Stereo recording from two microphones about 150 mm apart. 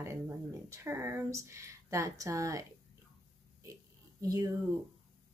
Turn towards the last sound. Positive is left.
turn(degrees=-25)  # may be behind; listen again after turning